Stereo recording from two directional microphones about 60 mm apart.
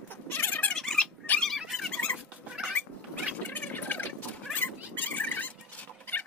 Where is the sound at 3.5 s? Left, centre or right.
Left.